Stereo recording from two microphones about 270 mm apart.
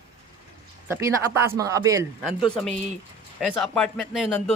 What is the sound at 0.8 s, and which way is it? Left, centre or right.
Speech, centre.